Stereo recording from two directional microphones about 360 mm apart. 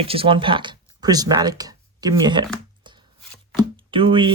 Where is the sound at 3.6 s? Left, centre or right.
Centre.